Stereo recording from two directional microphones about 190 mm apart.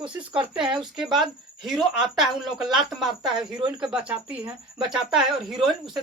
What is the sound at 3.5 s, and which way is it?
Speech, 25° right (ahead or behind).